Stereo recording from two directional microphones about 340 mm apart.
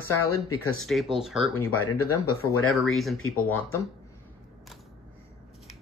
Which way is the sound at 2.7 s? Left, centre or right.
Centre.